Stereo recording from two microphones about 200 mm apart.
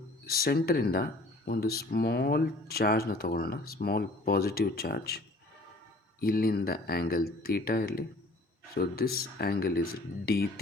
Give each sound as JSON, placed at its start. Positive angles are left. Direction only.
{"t": 0.3, "sound": "speech", "side_deg": 50}